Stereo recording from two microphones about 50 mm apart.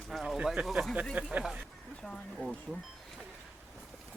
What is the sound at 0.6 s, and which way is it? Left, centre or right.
Speech, centre.